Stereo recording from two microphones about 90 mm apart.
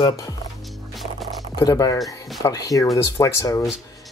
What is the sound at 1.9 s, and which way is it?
Speech, centre (ahead or behind).